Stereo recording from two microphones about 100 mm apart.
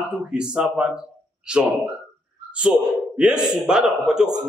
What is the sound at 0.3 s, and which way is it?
Speech, 10° right (ahead or behind).